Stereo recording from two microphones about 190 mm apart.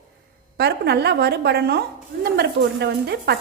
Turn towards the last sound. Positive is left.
turn(degrees=-60)  # may be behind; listen again after turning